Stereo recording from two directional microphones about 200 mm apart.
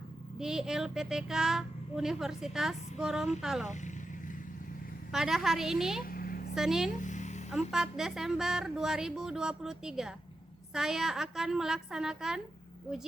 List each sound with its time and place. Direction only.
0.3 s a woman's voice: 5° right (ahead or behind)
3.7 s vehicle: 35° left (ahead or behind)
5.1 s a woman's voice: centre (ahead or behind)
6.0 s a sound: 45° left (ahead or behind)
6.5 s a woman's voice: centre (ahead or behind)
6.9 s music: 40° left (ahead or behind)
7.5 s a woman's voice: centre (ahead or behind)